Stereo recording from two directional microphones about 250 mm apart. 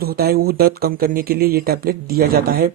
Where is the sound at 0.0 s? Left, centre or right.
Right.